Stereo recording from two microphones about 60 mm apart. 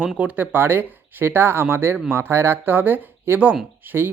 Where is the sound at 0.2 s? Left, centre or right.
Right.